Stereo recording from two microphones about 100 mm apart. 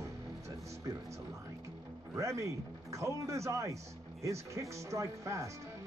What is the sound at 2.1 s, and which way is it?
Speech, 30° right (ahead or behind).